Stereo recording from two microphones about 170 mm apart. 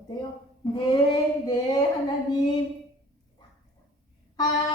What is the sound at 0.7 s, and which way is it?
Child singing, 25° left (ahead or behind).